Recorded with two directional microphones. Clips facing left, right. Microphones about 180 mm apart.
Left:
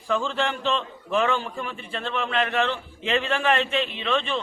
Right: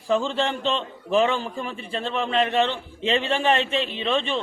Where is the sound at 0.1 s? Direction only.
30° right (ahead or behind).